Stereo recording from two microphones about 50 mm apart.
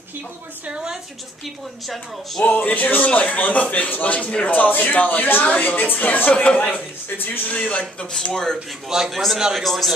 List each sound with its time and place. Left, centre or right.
0.7 s a woman's voice: right
2.4 s speech: left
6.4 s speech: left
7.2 s speech: left
7.5 s speech: left
8.1 s speech: centre
8.8 s a man's voice: centre